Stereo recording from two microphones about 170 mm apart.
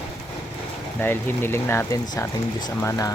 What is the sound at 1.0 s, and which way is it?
Speech, 15° left (ahead or behind).